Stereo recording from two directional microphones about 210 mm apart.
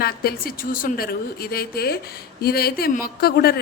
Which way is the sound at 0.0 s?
45° left (ahead or behind).